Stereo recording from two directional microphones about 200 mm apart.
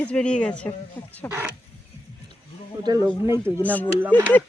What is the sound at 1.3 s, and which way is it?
Speech, 10° right (ahead or behind).